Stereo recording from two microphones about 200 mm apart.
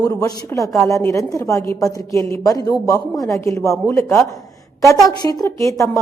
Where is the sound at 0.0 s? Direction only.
15° left (ahead or behind).